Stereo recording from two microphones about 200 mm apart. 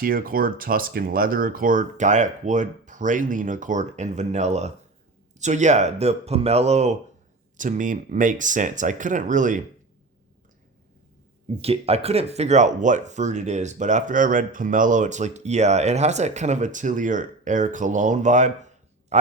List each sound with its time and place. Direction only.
0.0 s speech: 45° right (ahead or behind)
11.6 s a man's voice: 30° right (ahead or behind)